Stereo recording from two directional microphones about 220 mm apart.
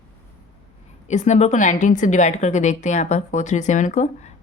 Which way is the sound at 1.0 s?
30° left (ahead or behind).